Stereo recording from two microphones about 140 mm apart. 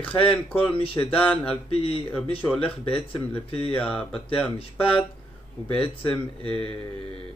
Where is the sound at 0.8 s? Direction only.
40° left (ahead or behind).